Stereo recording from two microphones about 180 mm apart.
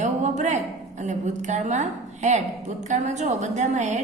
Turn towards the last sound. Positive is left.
turn(degrees=-40)  # may be behind; listen again after turning